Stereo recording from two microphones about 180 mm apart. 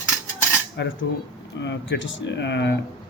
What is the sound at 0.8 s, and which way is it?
Speech, 75° left (ahead or behind).